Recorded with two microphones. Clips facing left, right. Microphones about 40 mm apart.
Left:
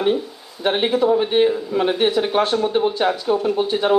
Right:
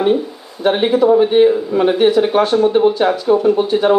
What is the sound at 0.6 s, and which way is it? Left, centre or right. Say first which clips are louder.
A man's voice: right 5 dB; centre.